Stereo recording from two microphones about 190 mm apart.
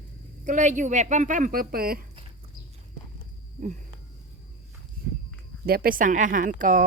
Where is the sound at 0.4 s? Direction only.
40° right (ahead or behind).